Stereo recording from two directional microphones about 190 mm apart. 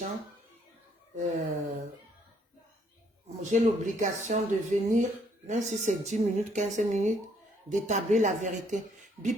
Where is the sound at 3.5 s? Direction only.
40° right (ahead or behind).